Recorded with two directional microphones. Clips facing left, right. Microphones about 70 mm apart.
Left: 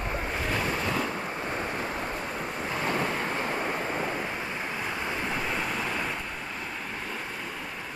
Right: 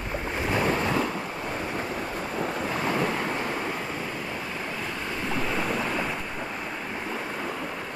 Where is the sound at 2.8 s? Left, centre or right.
Centre.